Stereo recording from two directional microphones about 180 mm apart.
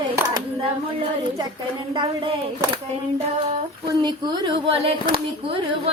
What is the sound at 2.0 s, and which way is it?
Speech, 25° right (ahead or behind).